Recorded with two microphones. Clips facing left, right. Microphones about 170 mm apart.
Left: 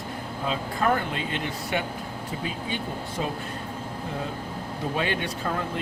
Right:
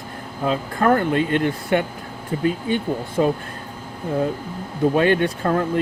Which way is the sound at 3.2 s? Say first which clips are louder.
Right 12 dB; 55° right (ahead or behind).